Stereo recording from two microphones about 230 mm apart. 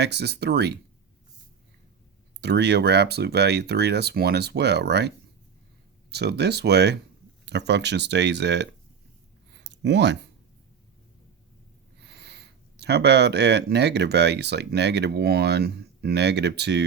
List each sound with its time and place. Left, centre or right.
0.0 s speech: right
2.4 s speech: right
12.0 s speech: right